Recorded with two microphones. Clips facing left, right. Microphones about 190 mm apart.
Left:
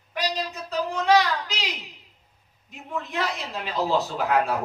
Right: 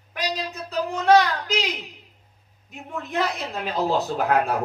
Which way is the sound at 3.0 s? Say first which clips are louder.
Right 6 dB; 50° right (ahead or behind).